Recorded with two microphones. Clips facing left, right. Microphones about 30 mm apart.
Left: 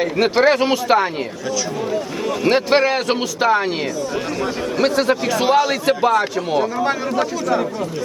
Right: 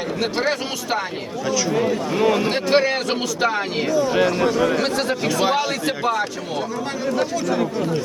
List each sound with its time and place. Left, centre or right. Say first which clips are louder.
0.4 s speech: left 8 dB; left
2.2 s a man's voice: right 5 dB; right
2.6 s speech: left 2 dB; centre
3.9 s speech: right 4 dB; centre
4.8 s speech: left 4 dB; centre